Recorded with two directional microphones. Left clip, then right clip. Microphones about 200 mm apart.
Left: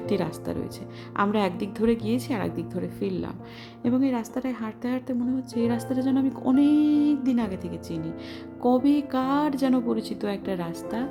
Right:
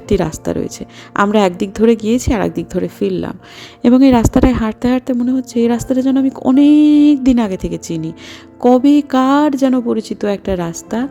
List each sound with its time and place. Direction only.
0.1 s a woman's voice: 35° right (ahead or behind)